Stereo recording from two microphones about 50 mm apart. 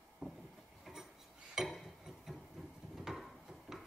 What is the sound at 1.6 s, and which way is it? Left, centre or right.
Dishes, centre.